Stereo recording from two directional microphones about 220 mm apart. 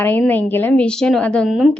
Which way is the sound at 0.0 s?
10° left (ahead or behind).